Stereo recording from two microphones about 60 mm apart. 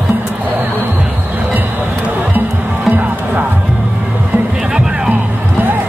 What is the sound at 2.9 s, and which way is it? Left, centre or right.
Music, right.